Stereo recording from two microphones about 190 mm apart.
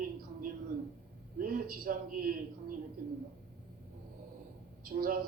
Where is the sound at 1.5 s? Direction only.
50° right (ahead or behind).